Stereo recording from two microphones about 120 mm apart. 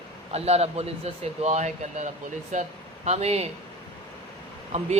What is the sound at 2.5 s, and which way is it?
Speech, 90° right.